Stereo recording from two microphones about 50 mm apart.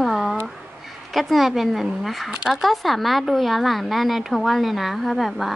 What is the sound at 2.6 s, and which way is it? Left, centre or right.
A child's voice, centre.